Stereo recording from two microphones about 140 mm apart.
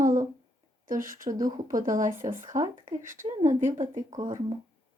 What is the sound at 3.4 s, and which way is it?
Speech, 55° right (ahead or behind).